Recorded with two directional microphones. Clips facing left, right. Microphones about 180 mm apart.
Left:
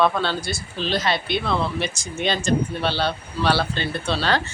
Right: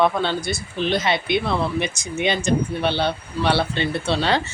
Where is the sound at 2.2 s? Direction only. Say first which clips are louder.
Right 1 dB; 20° right (ahead or behind).